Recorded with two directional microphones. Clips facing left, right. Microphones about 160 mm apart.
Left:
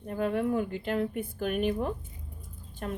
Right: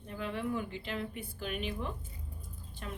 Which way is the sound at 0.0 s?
50° left (ahead or behind).